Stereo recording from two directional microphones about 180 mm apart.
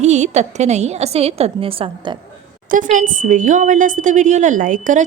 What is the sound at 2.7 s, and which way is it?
A woman's voice, 45° right (ahead or behind).